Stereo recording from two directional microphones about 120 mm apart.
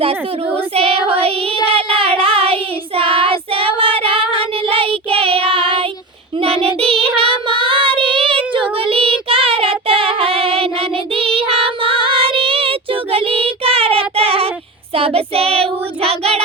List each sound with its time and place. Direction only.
0.0 s speech: 55° right (ahead or behind)
1.6 s child singing: 50° right (ahead or behind)